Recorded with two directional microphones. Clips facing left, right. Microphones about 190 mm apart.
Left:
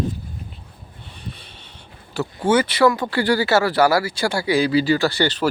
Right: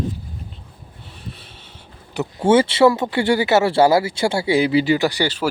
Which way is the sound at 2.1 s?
25° right (ahead or behind).